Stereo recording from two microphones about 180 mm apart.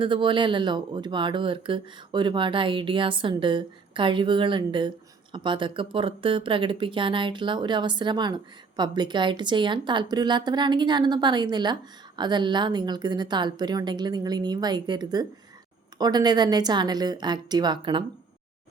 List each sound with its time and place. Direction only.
0.0 s speech: 25° right (ahead or behind)